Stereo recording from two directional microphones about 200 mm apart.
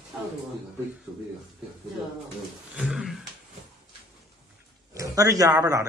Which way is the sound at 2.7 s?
5° right (ahead or behind).